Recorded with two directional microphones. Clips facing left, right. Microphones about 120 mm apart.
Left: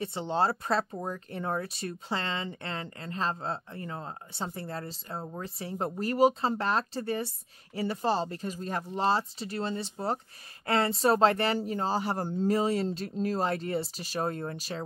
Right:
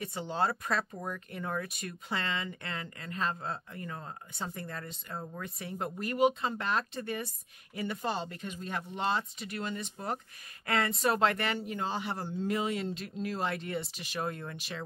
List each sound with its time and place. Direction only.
0.0 s speech: 30° left (ahead or behind)